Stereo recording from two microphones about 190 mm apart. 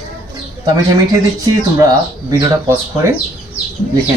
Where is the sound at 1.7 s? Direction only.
20° right (ahead or behind).